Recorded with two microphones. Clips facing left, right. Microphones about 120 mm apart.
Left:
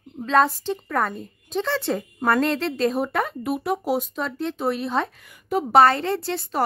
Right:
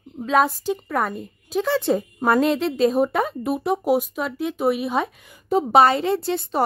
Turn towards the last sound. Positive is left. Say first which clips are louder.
# right 3 dB
turn(degrees=-20)  # may be behind; listen again after turning